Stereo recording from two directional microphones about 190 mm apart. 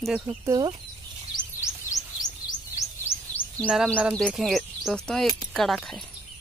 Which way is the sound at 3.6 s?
5° right (ahead or behind).